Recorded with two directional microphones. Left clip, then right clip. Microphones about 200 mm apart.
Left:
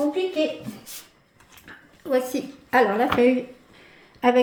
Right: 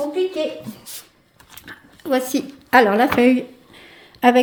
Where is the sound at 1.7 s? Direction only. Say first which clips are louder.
Right 3 dB; 55° right (ahead or behind).